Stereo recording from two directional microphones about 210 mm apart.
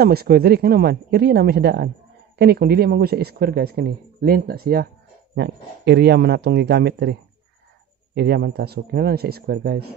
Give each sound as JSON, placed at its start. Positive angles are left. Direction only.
{"t": 0.0, "sound": "speech", "side_deg": -45}